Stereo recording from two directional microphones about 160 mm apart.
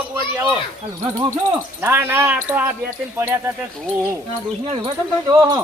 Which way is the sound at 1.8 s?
15° right (ahead or behind).